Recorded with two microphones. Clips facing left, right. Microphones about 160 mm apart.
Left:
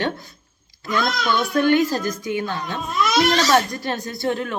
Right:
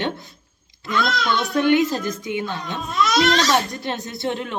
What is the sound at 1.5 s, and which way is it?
Speech, 20° right (ahead or behind).